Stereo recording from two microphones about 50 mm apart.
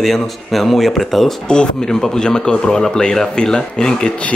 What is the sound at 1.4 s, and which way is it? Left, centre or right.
Speech, centre.